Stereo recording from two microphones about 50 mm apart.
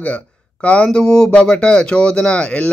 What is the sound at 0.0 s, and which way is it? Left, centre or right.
Speech, left.